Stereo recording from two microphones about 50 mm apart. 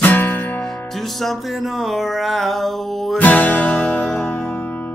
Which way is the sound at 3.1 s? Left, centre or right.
Left.